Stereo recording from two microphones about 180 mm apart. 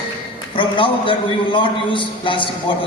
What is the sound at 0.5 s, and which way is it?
A man's voice, 30° left (ahead or behind).